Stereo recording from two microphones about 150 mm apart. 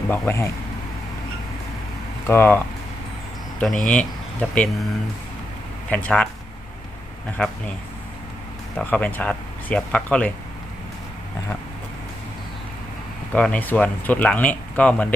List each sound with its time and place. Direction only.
0.1 s speech: 15° left (ahead or behind)
2.2 s speech: 15° left (ahead or behind)
3.8 s speech: 10° left (ahead or behind)
5.9 s speech: 5° left (ahead or behind)
7.4 s speech: centre (ahead or behind)
8.7 s speech: 10° left (ahead or behind)
13.3 s speech: 10° left (ahead or behind)